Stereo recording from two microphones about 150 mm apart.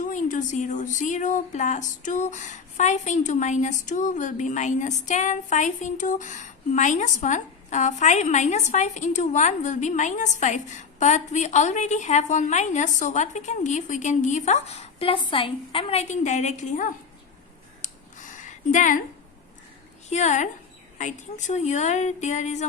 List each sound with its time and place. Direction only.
0.0 s a woman's voice: 60° left (ahead or behind)
17.8 s a sound: 55° left (ahead or behind)
20.1 s a woman's voice: 50° left (ahead or behind)